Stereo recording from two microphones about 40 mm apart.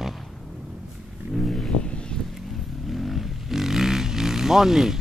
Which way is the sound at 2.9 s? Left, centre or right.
Centre.